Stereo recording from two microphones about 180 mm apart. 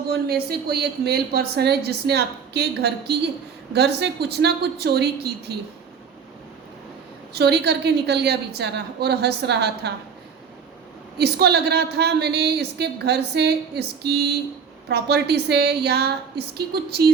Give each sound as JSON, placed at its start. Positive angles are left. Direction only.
{"t": 0.1, "sound": "a woman's voice", "side_deg": -60}
{"t": 7.3, "sound": "a woman's voice", "side_deg": -65}
{"t": 11.2, "sound": "a woman's voice", "side_deg": -65}